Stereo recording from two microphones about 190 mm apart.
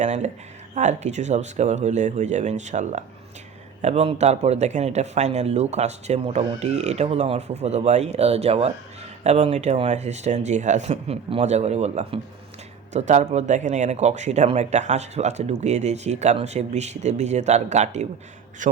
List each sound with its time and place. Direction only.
0.0 s speech: 40° right (ahead or behind)